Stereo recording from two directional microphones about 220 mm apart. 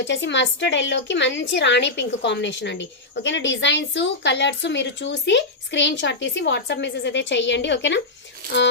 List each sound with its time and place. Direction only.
0.0 s a woman's voice: 55° left (ahead or behind)